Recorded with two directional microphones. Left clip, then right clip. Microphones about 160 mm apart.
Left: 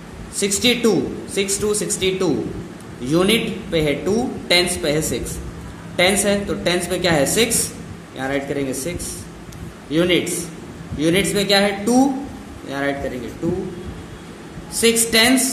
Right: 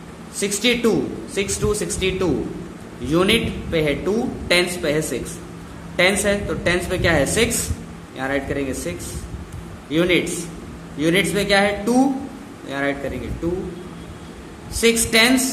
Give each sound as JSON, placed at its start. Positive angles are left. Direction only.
{"t": 0.4, "sound": "a man's voice", "side_deg": 15}
{"t": 14.8, "sound": "a man's voice", "side_deg": 15}